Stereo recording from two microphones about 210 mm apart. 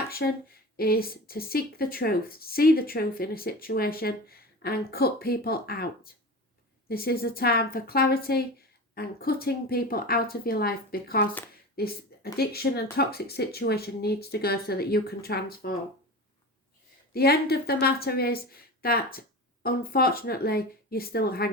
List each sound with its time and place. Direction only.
0.2 s speech: 55° left (ahead or behind)
17.2 s speech: 50° left (ahead or behind)